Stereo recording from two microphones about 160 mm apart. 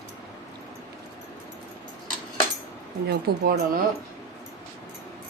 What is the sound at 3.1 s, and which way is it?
Speech, 75° right (ahead or behind).